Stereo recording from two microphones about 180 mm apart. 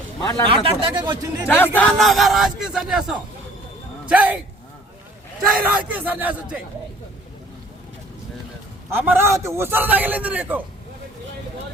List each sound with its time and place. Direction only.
0.2 s speech: 20° left (ahead or behind)
0.4 s speech: 30° right (ahead or behind)
1.5 s a man's voice: 10° left (ahead or behind); by 4.4 s 10° right (ahead or behind)
5.6 s a man's voice: 10° right (ahead or behind)
8.9 s a man's voice: 10° right (ahead or behind)